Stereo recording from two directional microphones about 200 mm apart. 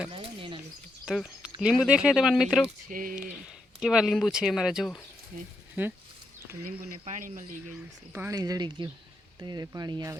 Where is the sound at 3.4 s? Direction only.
5° right (ahead or behind).